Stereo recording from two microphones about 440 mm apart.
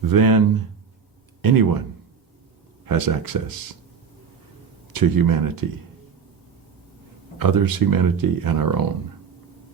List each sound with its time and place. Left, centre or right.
0.1 s speech: right
2.8 s speech: right
4.9 s speech: right
7.3 s speech: right